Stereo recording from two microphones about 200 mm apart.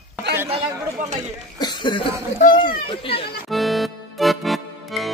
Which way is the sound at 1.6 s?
20° left (ahead or behind).